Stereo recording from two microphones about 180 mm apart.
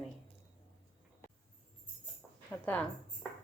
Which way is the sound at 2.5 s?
5° left (ahead or behind).